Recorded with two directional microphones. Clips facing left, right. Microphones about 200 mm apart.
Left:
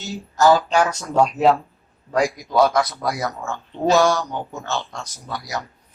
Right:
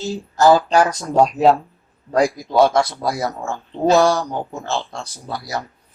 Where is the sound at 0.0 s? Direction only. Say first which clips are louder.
Right 2 dB; 30° right (ahead or behind).